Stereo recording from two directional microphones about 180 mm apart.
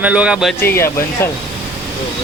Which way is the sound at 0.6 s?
15° left (ahead or behind).